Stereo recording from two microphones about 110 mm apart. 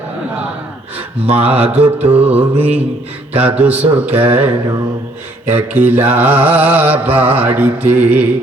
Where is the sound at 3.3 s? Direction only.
15° right (ahead or behind).